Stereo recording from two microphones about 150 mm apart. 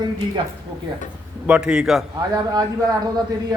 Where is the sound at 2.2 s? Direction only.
25° right (ahead or behind).